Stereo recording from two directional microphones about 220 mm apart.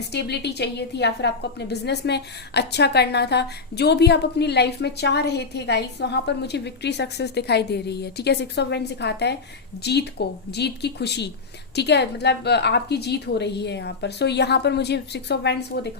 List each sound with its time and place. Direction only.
0.1 s a woman's voice: 50° left (ahead or behind)